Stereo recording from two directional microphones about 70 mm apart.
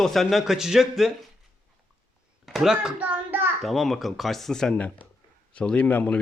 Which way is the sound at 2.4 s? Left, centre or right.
Centre.